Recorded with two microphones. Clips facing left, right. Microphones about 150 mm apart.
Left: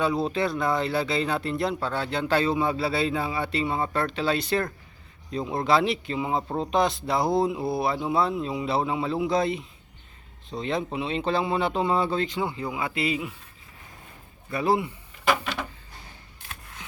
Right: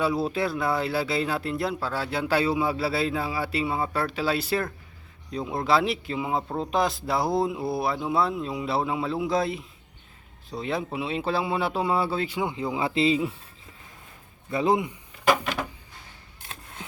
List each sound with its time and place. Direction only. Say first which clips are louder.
0.0 s speech: even; 5° right (ahead or behind)
12.5 s a man's voice: right 3 dB; 20° right (ahead or behind)
14.5 s a man's voice: right 1 dB; 20° right (ahead or behind)
15.3 s a sound: right 2 dB; 10° right (ahead or behind)